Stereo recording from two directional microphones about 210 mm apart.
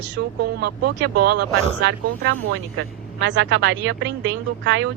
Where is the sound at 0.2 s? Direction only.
60° right (ahead or behind).